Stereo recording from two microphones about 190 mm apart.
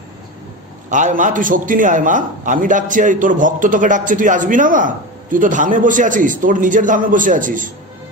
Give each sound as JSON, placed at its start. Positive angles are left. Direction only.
{"t": 0.9, "sound": "a man's voice", "side_deg": -40}